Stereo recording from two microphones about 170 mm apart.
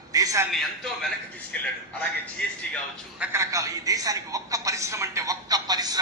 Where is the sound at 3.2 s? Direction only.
15° right (ahead or behind).